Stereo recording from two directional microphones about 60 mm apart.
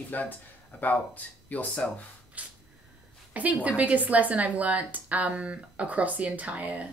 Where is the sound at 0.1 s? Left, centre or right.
Left.